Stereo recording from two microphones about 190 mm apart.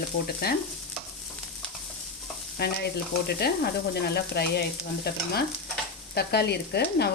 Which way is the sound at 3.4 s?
55° left (ahead or behind).